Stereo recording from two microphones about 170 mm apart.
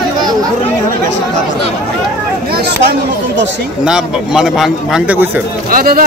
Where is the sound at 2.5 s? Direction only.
70° right (ahead or behind).